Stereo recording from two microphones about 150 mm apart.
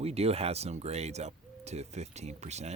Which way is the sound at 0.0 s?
45° right (ahead or behind).